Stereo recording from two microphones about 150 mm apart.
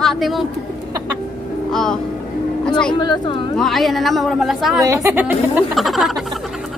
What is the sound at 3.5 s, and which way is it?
Speech, centre (ahead or behind).